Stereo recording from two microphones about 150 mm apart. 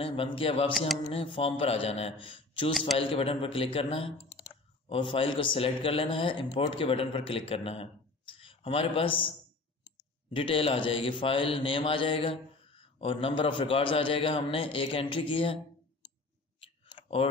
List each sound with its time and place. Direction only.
0.0 s a man's voice: 35° left (ahead or behind)
10.3 s a man's voice: 35° left (ahead or behind)
16.5 s clicking: 40° left (ahead or behind)